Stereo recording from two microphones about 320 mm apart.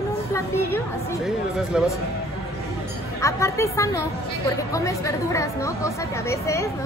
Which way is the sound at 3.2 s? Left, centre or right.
Centre.